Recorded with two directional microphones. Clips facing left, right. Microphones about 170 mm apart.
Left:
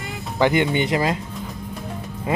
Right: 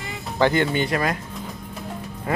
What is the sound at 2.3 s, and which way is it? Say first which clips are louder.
Speech: left 2 dB; 20° left (ahead or behind).